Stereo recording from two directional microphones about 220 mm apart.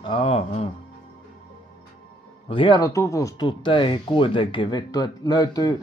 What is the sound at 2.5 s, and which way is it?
Speech, 20° left (ahead or behind).